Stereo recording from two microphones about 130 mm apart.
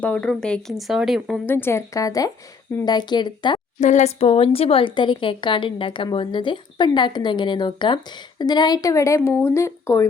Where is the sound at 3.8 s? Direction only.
65° left (ahead or behind); by 10.0 s 20° left (ahead or behind).